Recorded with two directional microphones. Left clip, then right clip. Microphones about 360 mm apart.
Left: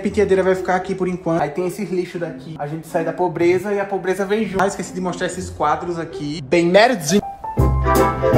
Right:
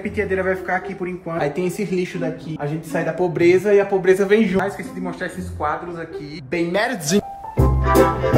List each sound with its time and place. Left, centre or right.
0.2 s speech: centre
6.5 s a woman's voice: centre
6.9 s music: centre